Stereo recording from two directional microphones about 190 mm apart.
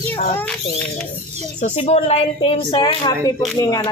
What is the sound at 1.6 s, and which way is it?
A woman's voice, 35° left (ahead or behind).